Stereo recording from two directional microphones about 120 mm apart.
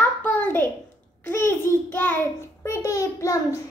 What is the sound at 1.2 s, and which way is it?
A child's voice, 20° left (ahead or behind).